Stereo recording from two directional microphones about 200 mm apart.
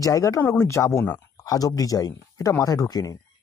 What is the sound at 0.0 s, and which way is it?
Speech, 15° left (ahead or behind).